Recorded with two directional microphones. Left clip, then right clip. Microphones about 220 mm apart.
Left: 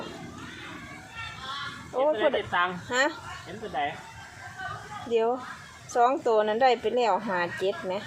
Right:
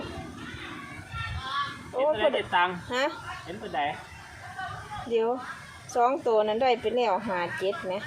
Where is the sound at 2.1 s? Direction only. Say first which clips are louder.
Right 1 dB; 50° right (ahead or behind).